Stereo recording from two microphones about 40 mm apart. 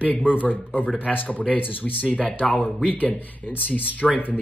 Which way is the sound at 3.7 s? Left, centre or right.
Left.